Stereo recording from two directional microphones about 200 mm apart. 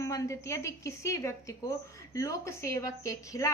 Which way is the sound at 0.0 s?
15° left (ahead or behind).